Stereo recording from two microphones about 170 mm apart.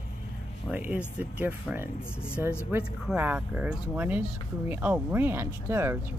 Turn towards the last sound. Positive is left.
turn(degrees=-10)  # may be behind; listen again after turning